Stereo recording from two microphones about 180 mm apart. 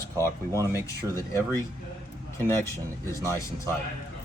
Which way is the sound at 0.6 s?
20° left (ahead or behind).